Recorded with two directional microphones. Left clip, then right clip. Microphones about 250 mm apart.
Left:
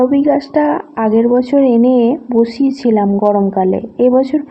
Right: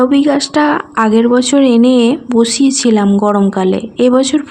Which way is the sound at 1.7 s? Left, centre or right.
Right.